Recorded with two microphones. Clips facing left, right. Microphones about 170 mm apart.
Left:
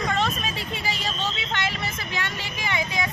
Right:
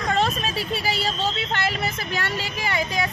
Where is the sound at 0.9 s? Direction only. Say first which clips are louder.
Right 4 dB; 35° right (ahead or behind).